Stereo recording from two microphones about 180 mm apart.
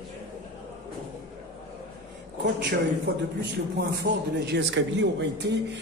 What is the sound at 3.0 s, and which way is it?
Speech, 70° right (ahead or behind).